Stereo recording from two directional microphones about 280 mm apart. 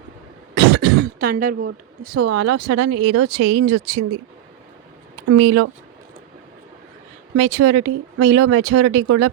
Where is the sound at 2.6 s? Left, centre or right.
Right.